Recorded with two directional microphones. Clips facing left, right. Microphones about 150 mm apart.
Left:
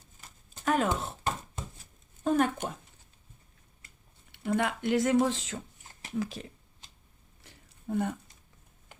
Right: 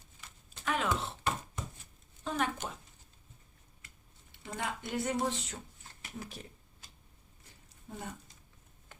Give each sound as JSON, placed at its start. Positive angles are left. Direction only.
{"t": 0.2, "sound": "chopping", "side_deg": 45}
{"t": 2.2, "sound": "speech", "side_deg": 50}
{"t": 4.3, "sound": "speech", "side_deg": 65}
{"t": 7.4, "sound": "a sound", "side_deg": 60}